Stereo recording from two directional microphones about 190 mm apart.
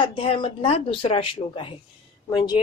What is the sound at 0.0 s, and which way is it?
Speech, 25° left (ahead or behind).